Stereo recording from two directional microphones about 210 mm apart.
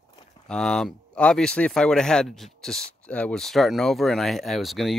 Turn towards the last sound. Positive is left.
turn(degrees=0)  # may be behind; listen again after turning